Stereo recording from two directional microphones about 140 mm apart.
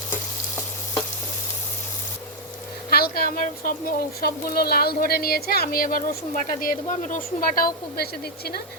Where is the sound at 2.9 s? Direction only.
90° left.